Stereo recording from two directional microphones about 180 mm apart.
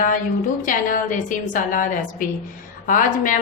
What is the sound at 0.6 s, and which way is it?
A woman's voice, 45° left (ahead or behind).